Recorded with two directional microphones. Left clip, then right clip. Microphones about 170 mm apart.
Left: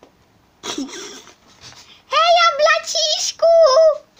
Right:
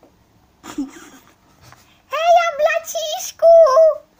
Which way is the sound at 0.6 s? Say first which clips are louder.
Left 3 dB; 55° left (ahead or behind).